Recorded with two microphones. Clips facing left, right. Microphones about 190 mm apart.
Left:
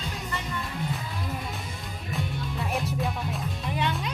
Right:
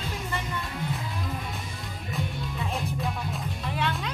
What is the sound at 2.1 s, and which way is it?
Music, centre (ahead or behind).